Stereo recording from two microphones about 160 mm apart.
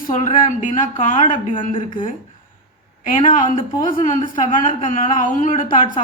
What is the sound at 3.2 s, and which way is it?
A man's voice, 55° left (ahead or behind).